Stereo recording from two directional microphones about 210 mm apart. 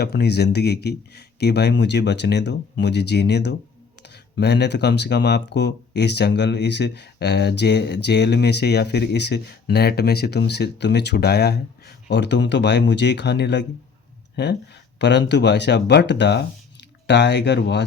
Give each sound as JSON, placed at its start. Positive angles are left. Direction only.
{"t": 0.0, "sound": "speech", "side_deg": 50}